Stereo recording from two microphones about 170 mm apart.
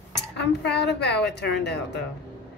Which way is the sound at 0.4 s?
85° left.